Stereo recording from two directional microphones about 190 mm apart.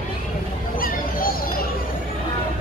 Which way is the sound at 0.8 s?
50° left (ahead or behind).